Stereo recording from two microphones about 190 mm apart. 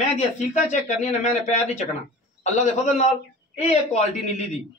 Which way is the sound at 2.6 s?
35° left (ahead or behind).